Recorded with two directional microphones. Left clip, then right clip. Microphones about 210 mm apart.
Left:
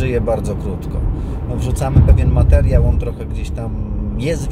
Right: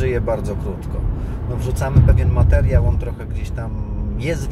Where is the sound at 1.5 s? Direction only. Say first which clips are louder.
Left 2 dB; 15° left (ahead or behind).